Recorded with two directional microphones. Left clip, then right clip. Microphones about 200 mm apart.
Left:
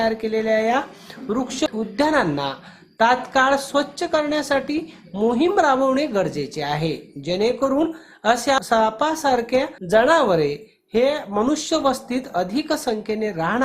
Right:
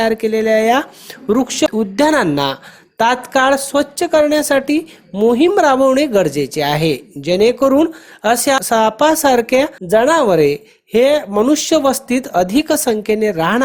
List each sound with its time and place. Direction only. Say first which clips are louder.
0.0 s speech: right 6 dB; 40° right (ahead or behind)